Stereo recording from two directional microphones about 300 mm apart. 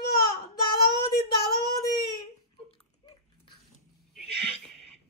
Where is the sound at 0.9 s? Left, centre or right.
Left.